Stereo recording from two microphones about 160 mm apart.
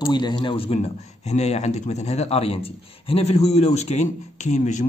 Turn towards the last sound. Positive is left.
turn(degrees=50)  # may be behind; listen again after turning